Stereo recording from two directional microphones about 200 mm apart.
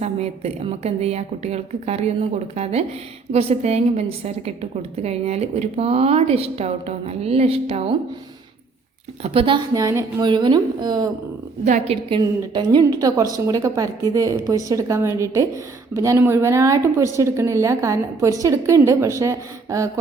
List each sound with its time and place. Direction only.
0.0 s a woman's voice: 30° right (ahead or behind)
9.2 s a woman's voice: 30° right (ahead or behind)
9.7 s a woman's voice: 15° right (ahead or behind)
11.6 s a woman's voice: 35° right (ahead or behind); by 19.9 s 15° right (ahead or behind)